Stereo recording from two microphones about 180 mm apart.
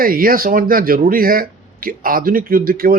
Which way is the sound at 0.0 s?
55° right (ahead or behind).